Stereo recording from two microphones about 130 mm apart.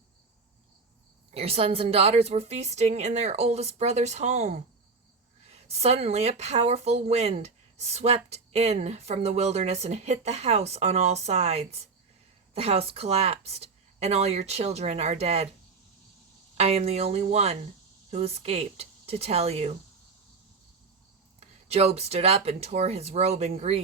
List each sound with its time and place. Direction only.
1.3 s a woman's voice: 50° right (ahead or behind)
16.6 s a woman's voice: 55° right (ahead or behind)
21.7 s a woman's voice: 55° right (ahead or behind)